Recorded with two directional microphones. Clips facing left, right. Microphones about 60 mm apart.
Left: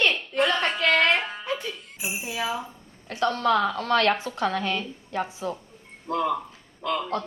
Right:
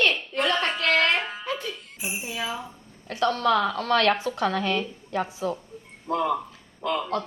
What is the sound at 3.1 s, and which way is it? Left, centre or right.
A woman's voice, left.